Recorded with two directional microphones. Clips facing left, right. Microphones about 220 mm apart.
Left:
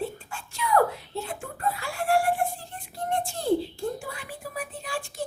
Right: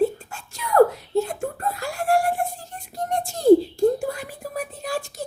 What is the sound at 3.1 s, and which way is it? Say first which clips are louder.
Whispering: right 10 dB; 40° right (ahead or behind).